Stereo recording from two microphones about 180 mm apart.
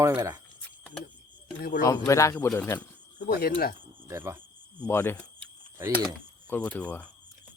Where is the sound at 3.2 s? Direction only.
55° left (ahead or behind).